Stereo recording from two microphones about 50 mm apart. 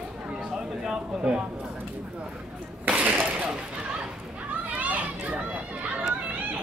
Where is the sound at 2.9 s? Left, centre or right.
Right.